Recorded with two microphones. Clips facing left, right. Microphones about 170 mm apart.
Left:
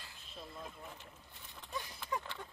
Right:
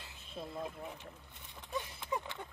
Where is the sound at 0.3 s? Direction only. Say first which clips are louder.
Right 7 dB; 50° right (ahead or behind).